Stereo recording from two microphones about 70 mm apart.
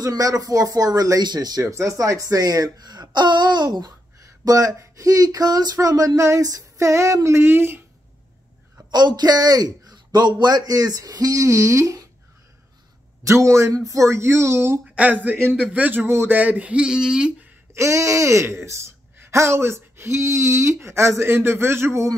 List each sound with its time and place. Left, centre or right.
0.0 s speech: right
1.2 s speech: right
1.7 s speech: right
4.5 s speech: right
8.9 s a man's voice: right
10.4 s speech: right
13.2 s speech: right
15.0 s a man's voice: right
16.1 s speech: right
16.3 s a sound: right
17.7 s speech: right